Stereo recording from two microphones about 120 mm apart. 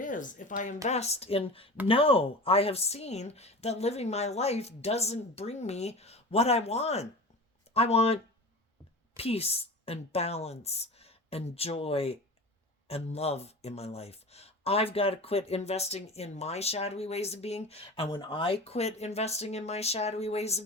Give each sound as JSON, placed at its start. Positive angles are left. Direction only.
{"t": 0.0, "sound": "a woman's voice", "side_deg": 90}
{"t": 0.9, "sound": "a woman's voice", "side_deg": 65}